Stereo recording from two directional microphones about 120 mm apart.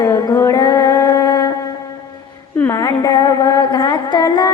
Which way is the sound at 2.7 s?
30° left (ahead or behind).